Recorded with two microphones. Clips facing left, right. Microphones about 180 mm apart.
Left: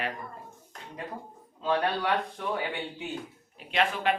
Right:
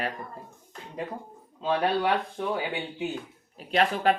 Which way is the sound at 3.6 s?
40° right (ahead or behind).